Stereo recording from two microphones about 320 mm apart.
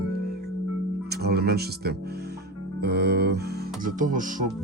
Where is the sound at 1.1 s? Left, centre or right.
Right.